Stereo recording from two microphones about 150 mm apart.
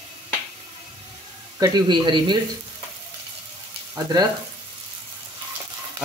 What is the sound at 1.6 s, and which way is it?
Speech, 30° right (ahead or behind).